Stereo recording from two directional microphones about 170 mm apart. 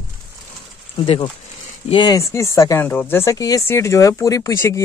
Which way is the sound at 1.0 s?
35° left (ahead or behind).